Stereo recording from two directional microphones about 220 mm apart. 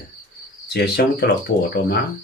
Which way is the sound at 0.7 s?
50° left (ahead or behind).